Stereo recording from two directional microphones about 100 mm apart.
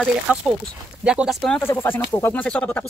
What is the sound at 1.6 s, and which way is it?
Speech, 25° left (ahead or behind).